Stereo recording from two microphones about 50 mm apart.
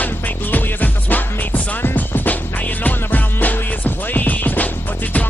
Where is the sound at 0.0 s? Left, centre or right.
Left.